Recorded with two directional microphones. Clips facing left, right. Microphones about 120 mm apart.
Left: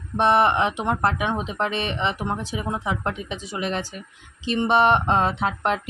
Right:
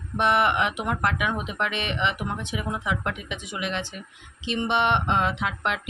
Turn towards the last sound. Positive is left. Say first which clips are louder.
# left 4 dB
turn(degrees=40)  # may be behind; listen again after turning